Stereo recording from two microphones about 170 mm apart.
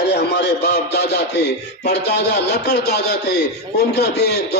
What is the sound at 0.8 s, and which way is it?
Music, 80° left.